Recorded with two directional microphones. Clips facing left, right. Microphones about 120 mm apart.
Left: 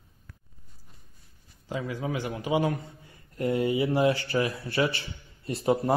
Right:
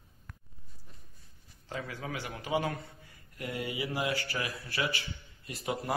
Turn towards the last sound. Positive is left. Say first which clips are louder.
# left 10 dB
turn(degrees=30)  # may be behind; listen again after turning